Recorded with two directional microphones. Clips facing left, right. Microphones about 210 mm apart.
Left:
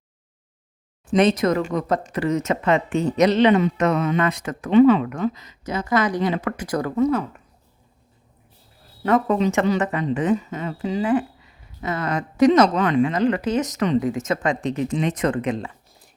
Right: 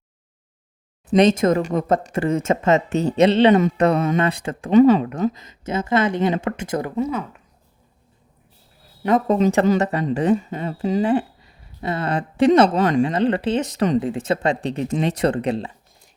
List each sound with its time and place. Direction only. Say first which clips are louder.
1.5 s speech: right 2 dB; 25° right (ahead or behind)
1.9 s speech: right 3 dB; 50° right (ahead or behind)
2.9 s speech: even; 35° right (ahead or behind)
4.7 s speech: right 1 dB; 40° right (ahead or behind)
5.4 s speech: right 3 dB; 25° right (ahead or behind)
7.1 s speech: left 4 dB; centre (ahead or behind)
9.0 s speech: right 1 dB; 20° right (ahead or behind)
9.3 s speech: right 3 dB; 35° right (ahead or behind)
11.1 s a woman's voice: right 1 dB; 30° right (ahead or behind)